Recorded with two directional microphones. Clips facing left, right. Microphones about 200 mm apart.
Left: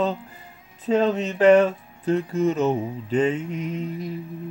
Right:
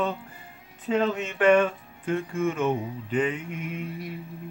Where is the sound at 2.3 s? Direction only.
40° left (ahead or behind).